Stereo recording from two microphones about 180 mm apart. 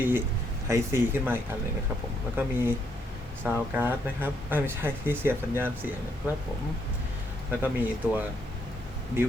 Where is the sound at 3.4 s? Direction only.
10° right (ahead or behind).